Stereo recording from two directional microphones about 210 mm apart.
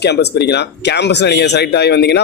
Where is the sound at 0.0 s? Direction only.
50° left (ahead or behind).